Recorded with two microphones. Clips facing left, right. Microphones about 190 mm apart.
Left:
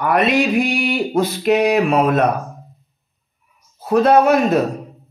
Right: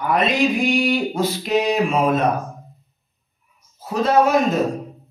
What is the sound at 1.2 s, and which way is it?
Speech, 60° left (ahead or behind).